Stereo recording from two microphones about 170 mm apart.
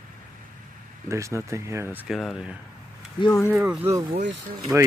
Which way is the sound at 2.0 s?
Centre (ahead or behind).